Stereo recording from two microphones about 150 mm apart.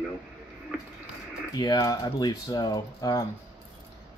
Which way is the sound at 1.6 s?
25° left (ahead or behind).